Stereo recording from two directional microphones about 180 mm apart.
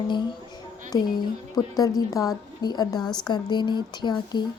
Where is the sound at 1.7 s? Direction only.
20° left (ahead or behind).